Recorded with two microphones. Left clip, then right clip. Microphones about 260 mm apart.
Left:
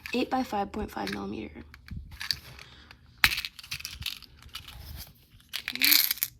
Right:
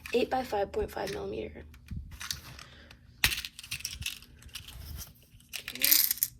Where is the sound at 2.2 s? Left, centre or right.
Left.